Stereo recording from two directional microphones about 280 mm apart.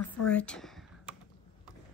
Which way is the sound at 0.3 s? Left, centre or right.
Centre.